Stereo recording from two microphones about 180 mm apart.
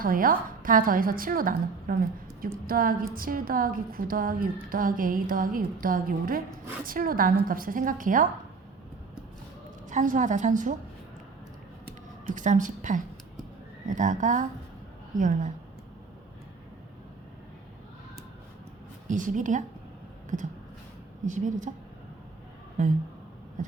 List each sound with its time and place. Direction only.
0.0 s a woman's voice: 50° right (ahead or behind)
9.9 s a woman's voice: 45° right (ahead or behind)
12.2 s a woman's voice: 45° right (ahead or behind)
19.0 s a woman's voice: 45° right (ahead or behind)
22.8 s a woman's voice: 45° right (ahead or behind)